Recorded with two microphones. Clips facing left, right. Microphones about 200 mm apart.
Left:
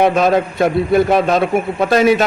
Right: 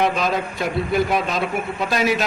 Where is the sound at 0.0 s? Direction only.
55° left (ahead or behind).